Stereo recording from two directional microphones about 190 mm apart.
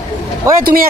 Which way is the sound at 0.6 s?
50° right (ahead or behind).